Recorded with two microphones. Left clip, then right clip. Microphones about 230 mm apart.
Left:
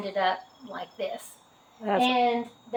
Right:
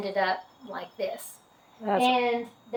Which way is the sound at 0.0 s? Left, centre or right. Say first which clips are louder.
Even; centre.